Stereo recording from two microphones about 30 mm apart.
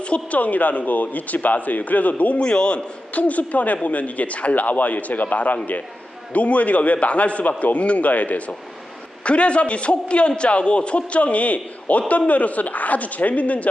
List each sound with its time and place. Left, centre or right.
0.0 s speech: left
0.3 s a man's voice: left
2.4 s a man's voice: left
3.1 s a man's voice: left
6.3 s a man's voice: left
9.2 s a man's voice: left